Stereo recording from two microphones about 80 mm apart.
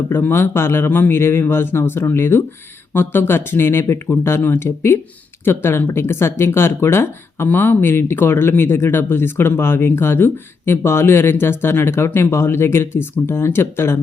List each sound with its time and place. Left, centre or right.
0.1 s speech: left